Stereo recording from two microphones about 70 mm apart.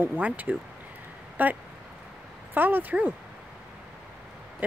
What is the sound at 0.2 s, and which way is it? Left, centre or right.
Speech, right.